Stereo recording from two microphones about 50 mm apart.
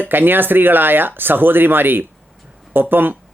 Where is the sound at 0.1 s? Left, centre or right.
Right.